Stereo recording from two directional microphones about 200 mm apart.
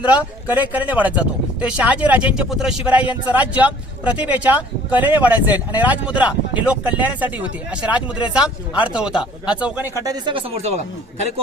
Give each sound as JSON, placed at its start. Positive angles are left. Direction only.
{"t": 0.1, "sound": "speech", "side_deg": -10}
{"t": 10.0, "sound": "speech", "side_deg": -20}